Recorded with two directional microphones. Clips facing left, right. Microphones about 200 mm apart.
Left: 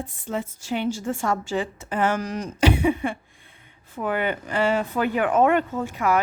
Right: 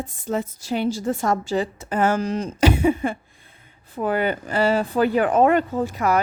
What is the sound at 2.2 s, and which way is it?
Speech, 25° right (ahead or behind).